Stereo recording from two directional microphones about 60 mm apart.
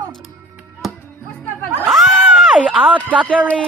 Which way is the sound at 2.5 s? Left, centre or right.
Centre.